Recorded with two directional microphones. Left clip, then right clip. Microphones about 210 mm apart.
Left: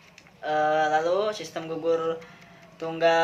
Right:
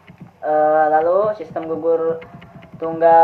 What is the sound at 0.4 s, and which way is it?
Speech, 40° left (ahead or behind).